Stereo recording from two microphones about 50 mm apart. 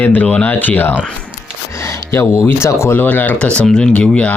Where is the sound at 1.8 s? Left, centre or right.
Left.